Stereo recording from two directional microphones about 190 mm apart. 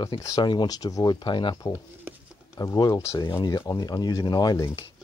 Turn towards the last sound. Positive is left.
turn(degrees=20)  # may be behind; listen again after turning